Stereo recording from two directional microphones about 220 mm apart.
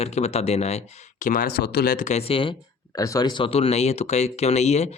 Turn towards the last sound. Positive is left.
turn(degrees=30)  # may be behind; listen again after turning